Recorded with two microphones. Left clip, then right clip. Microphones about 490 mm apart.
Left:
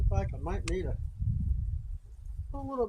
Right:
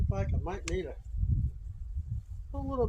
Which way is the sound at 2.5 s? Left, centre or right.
Left.